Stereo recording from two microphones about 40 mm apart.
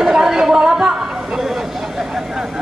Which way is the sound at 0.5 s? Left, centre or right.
Centre.